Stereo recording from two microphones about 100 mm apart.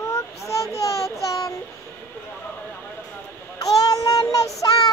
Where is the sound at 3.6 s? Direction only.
35° left (ahead or behind).